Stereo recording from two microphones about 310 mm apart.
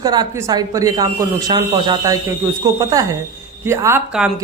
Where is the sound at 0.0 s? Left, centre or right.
Centre.